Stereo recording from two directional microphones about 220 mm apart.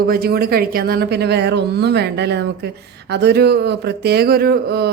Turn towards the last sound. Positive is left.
turn(degrees=-45)  # may be behind; listen again after turning